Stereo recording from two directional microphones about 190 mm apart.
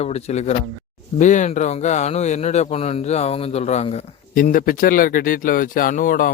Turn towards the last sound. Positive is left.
turn(degrees=45)  # may be behind; listen again after turning